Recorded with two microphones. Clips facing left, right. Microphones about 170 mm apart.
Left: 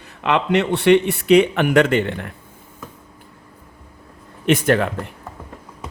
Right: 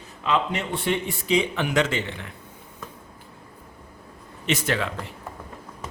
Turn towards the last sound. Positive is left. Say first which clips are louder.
# left 9 dB
turn(degrees=55)  # may be behind; listen again after turning